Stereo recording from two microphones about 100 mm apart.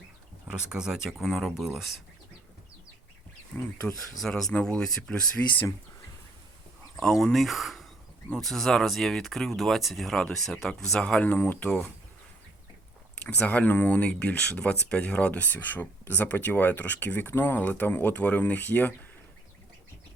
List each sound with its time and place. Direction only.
0.4 s speech: 5° right (ahead or behind)
3.5 s speech: 20° left (ahead or behind)
4.2 s speech: 5° left (ahead or behind)
5.4 s speech: 20° left (ahead or behind)
6.9 s speech: centre (ahead or behind); by 11.7 s 15° left (ahead or behind)
13.2 s speech: 15° left (ahead or behind)